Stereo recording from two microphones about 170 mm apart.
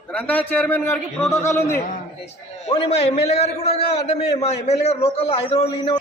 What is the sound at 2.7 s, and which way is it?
A man's voice, 35° left (ahead or behind).